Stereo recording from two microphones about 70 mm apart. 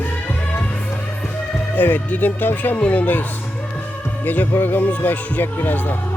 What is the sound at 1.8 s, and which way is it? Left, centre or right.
Speech, left.